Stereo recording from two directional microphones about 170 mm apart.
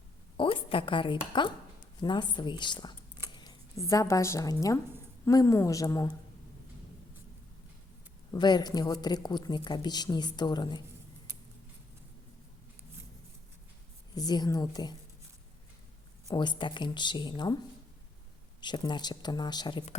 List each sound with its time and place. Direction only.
0.3 s a woman's voice: 30° left (ahead or behind)
8.3 s a woman's voice: 25° left (ahead or behind)
14.2 s a woman's voice: 25° left (ahead or behind)
16.3 s a woman's voice: 25° left (ahead or behind)
18.6 s a woman's voice: 25° left (ahead or behind)